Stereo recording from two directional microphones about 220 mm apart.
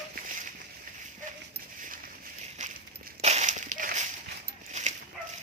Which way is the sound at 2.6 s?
30° right (ahead or behind).